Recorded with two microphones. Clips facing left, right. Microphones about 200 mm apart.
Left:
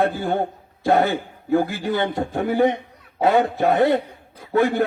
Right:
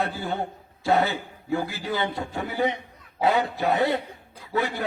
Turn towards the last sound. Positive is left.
turn(degrees=50)  # may be behind; listen again after turning